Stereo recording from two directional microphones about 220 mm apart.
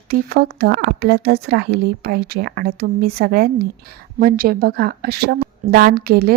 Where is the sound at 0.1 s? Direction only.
45° right (ahead or behind).